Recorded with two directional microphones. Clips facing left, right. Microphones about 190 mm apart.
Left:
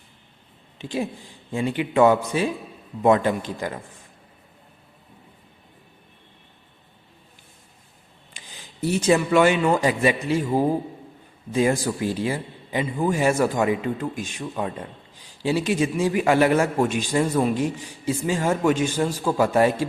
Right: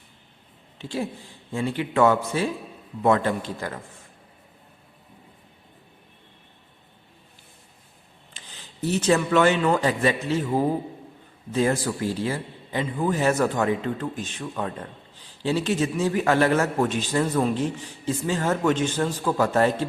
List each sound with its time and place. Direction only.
0.8 s a man's voice: 15° left (ahead or behind)
8.3 s a man's voice: 10° left (ahead or behind)